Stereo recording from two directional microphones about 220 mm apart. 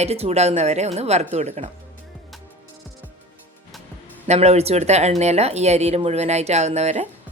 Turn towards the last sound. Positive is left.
turn(degrees=-30)  # may be behind; listen again after turning